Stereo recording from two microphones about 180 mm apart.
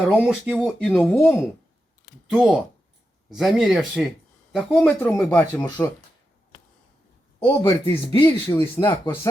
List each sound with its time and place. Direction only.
0.1 s speech: 5° right (ahead or behind)
0.5 s speech: 5° left (ahead or behind)
7.3 s speech: 15° left (ahead or behind)
8.0 s speech: 25° left (ahead or behind)